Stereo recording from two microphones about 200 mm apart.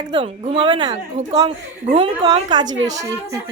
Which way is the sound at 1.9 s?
25° right (ahead or behind).